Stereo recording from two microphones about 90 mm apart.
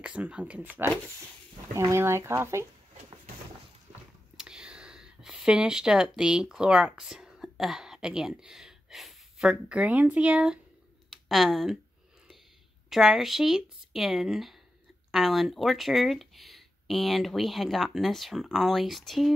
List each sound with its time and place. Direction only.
0.0 s speech: 15° right (ahead or behind)
1.7 s speech: 35° right (ahead or behind)
4.4 s speech: 10° right (ahead or behind)
12.9 s speech: 5° right (ahead or behind)